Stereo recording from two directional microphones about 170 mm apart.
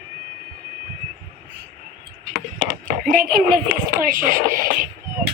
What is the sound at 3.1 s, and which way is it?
A child's voice, 55° right (ahead or behind).